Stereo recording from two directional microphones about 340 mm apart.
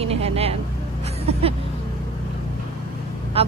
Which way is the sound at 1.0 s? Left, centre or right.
Centre.